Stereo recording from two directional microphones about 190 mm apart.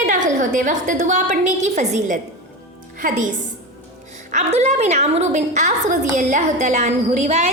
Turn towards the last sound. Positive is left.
turn(degrees=-35)  # may be behind; listen again after turning